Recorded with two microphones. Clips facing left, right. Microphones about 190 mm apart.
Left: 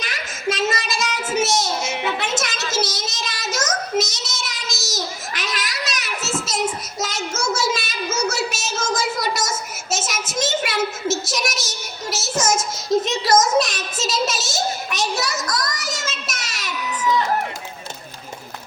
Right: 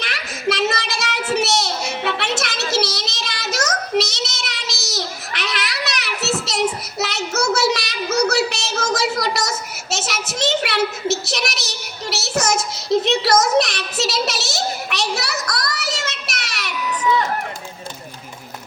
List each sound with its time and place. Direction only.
0.0 s child singing: 65° right (ahead or behind)
2.0 s music: 65° right (ahead or behind)
2.7 s child singing: 65° right (ahead or behind)